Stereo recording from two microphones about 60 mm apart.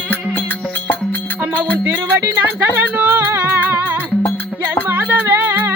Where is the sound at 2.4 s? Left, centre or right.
Right.